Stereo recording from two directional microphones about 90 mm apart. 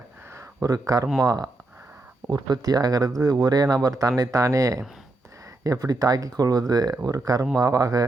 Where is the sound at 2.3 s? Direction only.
50° right (ahead or behind).